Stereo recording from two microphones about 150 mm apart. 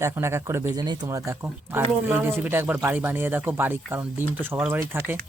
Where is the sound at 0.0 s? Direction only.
20° right (ahead or behind).